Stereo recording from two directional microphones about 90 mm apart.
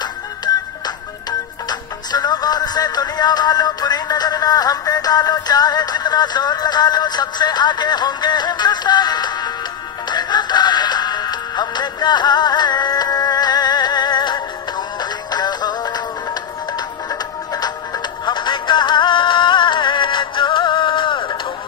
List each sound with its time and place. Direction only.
0.0 s music: 50° left (ahead or behind)